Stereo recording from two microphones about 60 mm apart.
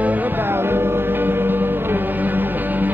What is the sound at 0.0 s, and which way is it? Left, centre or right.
Music, right.